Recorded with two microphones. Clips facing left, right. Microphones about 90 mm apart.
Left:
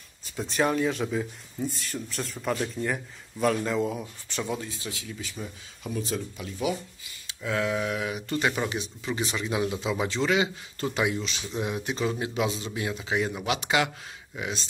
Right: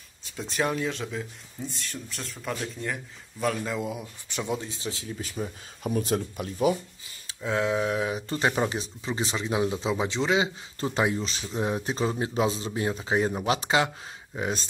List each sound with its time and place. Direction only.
0.2 s speech: centre (ahead or behind)
4.3 s speech: 15° right (ahead or behind)
5.9 s speech: 55° right (ahead or behind)
7.4 s speech: 25° right (ahead or behind)